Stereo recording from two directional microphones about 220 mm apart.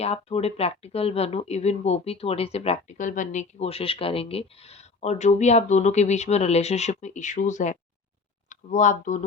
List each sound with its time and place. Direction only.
0.0 s speech: 30° left (ahead or behind)